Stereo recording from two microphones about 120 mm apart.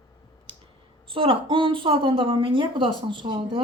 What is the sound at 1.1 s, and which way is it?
A woman's voice, 45° right (ahead or behind).